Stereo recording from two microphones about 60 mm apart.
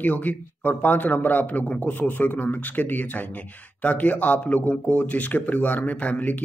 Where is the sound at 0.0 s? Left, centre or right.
Left.